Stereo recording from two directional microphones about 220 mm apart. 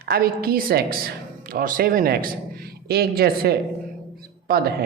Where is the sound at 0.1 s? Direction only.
45° right (ahead or behind).